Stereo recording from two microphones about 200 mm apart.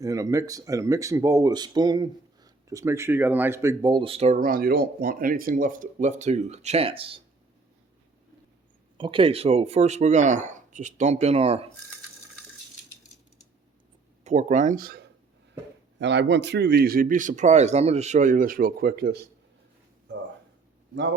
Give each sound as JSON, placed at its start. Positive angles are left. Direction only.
{"t": 0.0, "sound": "speech", "side_deg": -15}
{"t": 9.0, "sound": "speech", "side_deg": -25}
{"t": 14.3, "sound": "speech", "side_deg": -35}
{"t": 16.0, "sound": "a man's voice", "side_deg": -60}